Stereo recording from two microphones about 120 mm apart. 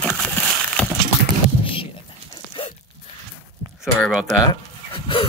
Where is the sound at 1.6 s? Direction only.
50° left (ahead or behind).